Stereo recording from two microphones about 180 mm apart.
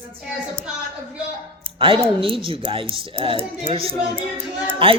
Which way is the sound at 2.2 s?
30° right (ahead or behind).